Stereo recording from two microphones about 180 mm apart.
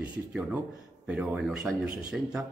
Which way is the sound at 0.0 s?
5° right (ahead or behind).